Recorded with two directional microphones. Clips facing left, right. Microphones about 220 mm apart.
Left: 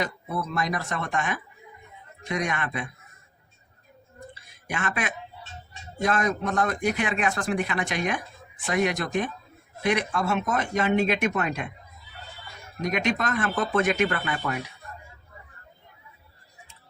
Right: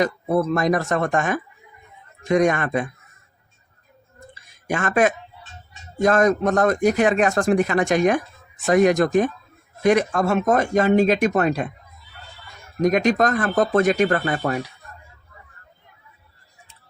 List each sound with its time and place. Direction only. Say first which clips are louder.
0.0 s a man's voice: right 10 dB; 50° right (ahead or behind)
4.4 s a sound: right 8 dB; 45° right (ahead or behind)
6.0 s a man's voice: right 8 dB; 45° right (ahead or behind)
12.8 s speech: right 8 dB; 40° right (ahead or behind)